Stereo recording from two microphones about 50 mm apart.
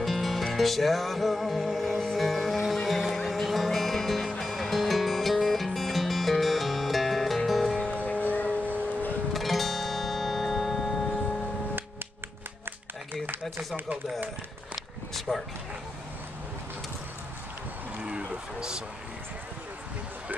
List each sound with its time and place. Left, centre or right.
0.0 s music: centre
7.8 s music: left
9.3 s music: centre
12.6 s a sound: right
15.1 s dog: centre
17.9 s a sound: right